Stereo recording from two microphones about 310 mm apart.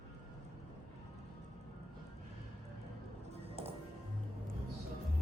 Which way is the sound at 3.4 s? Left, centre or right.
Centre.